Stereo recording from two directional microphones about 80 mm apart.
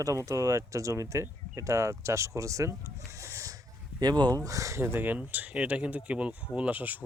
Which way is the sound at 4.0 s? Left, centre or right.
Right.